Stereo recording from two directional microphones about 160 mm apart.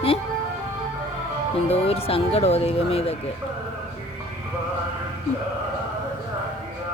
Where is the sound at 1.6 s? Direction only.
40° left (ahead or behind).